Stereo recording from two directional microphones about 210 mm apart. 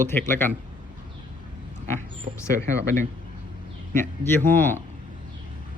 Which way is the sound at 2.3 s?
35° right (ahead or behind).